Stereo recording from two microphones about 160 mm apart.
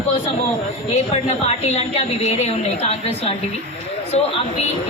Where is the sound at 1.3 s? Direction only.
40° left (ahead or behind).